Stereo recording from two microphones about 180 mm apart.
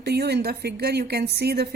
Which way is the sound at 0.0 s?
65° right (ahead or behind).